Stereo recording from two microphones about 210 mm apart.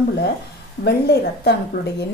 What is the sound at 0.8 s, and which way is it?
Speech, 50° left (ahead or behind).